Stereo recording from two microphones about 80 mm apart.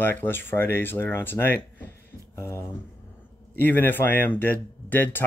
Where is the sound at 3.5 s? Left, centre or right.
Left.